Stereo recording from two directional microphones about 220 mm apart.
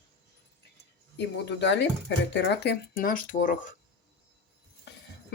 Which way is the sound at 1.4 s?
55° left (ahead or behind).